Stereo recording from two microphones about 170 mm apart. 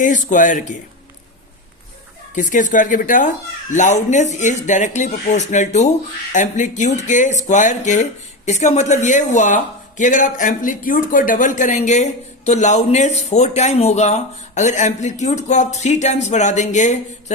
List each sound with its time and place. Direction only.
0.0 s speech: 50° left (ahead or behind)
2.3 s speech: 50° left (ahead or behind)